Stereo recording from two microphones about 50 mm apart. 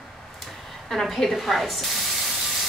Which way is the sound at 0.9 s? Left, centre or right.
Centre.